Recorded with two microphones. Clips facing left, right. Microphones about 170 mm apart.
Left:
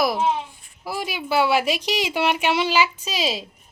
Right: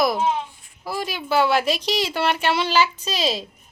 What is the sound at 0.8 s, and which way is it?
Speech, 10° left (ahead or behind).